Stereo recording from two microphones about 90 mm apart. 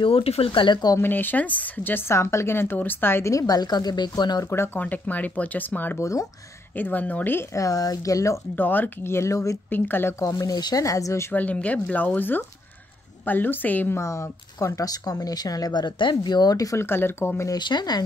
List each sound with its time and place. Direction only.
0.0 s speech: 90° left; by 0.9 s 55° left (ahead or behind)
0.9 s speech: 25° left (ahead or behind); by 4.5 s 50° left (ahead or behind)
4.7 s speech: 20° left (ahead or behind)
5.9 s speech: 35° left (ahead or behind)
6.7 s speech: 20° left (ahead or behind)
7.5 s speech: 40° left (ahead or behind)
8.5 s speech: 20° left (ahead or behind); by 9.6 s 35° left (ahead or behind)
9.7 s speech: 20° left (ahead or behind)
10.2 s speech: 40° left (ahead or behind)
11.3 s speech: 15° left (ahead or behind)
13.9 s speech: 30° left (ahead or behind)
16.7 s speech: 25° left (ahead or behind)
17.6 s speech: 55° left (ahead or behind)